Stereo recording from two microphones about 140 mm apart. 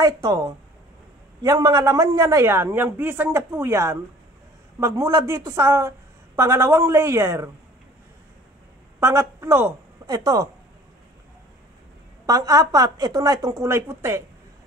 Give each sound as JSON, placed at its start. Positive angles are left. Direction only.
{"t": 0.0, "sound": "a woman's voice", "side_deg": -25}
{"t": 9.0, "sound": "a woman's voice", "side_deg": -20}
{"t": 12.3, "sound": "a woman's voice", "side_deg": -25}